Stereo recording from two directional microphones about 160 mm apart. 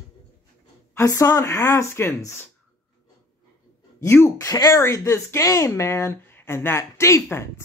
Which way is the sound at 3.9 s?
15° left (ahead or behind).